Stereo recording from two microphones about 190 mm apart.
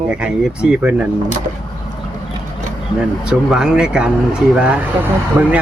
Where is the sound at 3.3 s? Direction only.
5° right (ahead or behind).